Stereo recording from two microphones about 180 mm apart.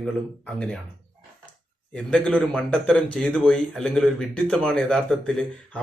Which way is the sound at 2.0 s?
5° left (ahead or behind).